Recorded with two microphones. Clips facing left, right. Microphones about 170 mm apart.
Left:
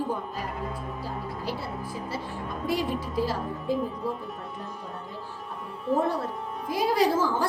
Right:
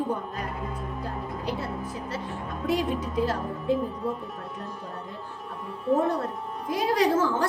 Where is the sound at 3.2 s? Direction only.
10° left (ahead or behind).